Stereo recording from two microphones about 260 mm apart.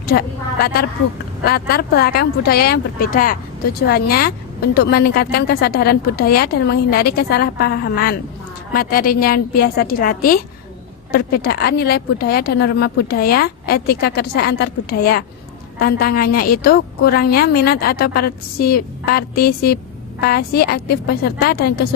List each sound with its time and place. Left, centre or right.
0.0 s speech: left